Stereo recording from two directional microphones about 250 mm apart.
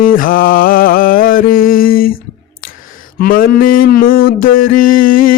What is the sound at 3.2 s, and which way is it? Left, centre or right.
Mantra, left.